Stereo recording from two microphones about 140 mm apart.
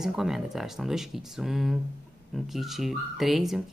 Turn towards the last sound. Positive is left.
turn(degrees=0)  # may be behind; listen again after turning